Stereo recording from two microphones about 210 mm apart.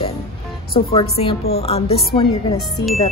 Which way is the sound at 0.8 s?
30° left (ahead or behind).